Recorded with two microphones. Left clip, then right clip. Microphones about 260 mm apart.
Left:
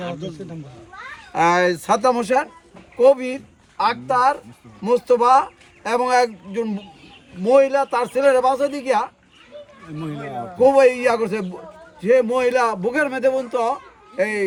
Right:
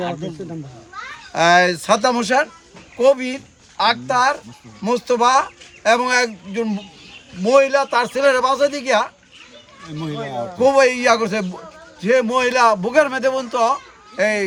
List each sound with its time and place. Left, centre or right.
0.0 s speech: right
1.3 s speech: centre
10.1 s speech: right
10.6 s speech: centre